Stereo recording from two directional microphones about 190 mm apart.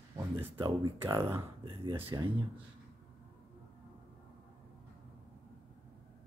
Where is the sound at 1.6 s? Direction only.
25° right (ahead or behind).